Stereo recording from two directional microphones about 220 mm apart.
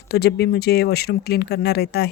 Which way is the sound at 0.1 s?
45° left (ahead or behind).